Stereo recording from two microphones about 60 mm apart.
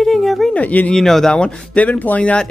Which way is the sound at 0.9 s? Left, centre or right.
Centre.